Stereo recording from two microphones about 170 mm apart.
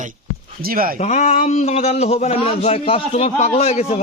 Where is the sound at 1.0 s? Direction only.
40° left (ahead or behind).